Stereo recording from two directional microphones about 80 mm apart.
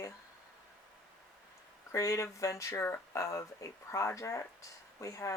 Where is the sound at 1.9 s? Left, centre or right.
Left.